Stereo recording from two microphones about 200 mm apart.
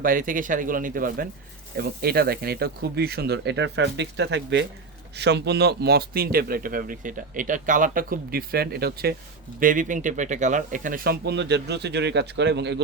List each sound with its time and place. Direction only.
0.0 s speech: 45° right (ahead or behind); by 12.8 s 60° right (ahead or behind)